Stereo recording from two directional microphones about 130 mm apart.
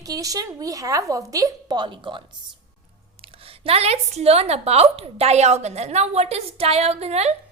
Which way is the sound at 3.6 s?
50° right (ahead or behind).